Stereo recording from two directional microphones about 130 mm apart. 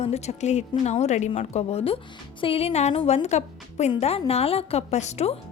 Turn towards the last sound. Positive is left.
turn(degrees=60)  # may be behind; listen again after turning